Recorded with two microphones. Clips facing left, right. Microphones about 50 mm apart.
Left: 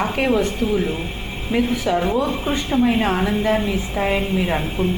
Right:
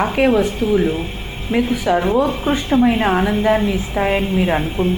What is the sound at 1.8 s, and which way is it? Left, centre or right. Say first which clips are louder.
A woman's voice: right 4 dB; right.